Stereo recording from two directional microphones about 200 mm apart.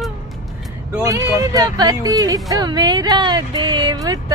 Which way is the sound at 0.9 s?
15° right (ahead or behind).